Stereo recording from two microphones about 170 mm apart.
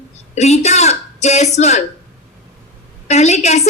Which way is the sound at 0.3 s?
40° left (ahead or behind).